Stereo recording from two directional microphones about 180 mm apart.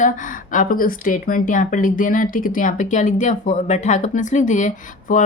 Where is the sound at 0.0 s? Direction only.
45° left (ahead or behind).